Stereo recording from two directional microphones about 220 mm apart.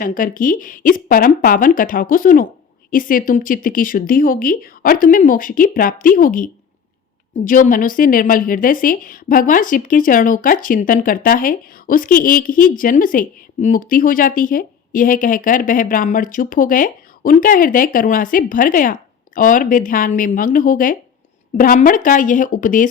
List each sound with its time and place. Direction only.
0.0 s a woman's voice: 40° left (ahead or behind)